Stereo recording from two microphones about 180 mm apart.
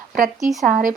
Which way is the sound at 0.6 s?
45° right (ahead or behind).